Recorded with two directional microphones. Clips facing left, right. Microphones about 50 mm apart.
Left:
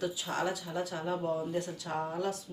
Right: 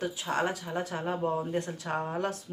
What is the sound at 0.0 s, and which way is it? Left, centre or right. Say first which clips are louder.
A woman's voice: right 3 dB; right.